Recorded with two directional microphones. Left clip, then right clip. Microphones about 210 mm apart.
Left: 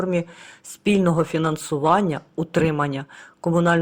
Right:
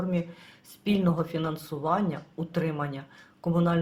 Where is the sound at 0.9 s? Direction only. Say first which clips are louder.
Left 8 dB; 35° left (ahead or behind).